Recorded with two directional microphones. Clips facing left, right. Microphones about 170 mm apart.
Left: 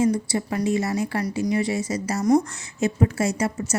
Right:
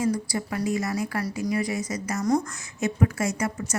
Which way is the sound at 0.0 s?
25° left (ahead or behind).